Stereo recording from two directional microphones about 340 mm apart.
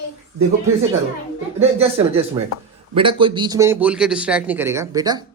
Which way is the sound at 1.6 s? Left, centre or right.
Centre.